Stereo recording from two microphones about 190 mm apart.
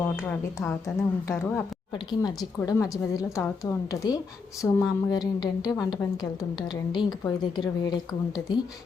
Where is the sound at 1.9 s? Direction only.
20° left (ahead or behind).